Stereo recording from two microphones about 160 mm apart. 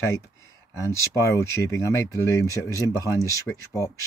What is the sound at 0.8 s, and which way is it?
Speech, 20° left (ahead or behind).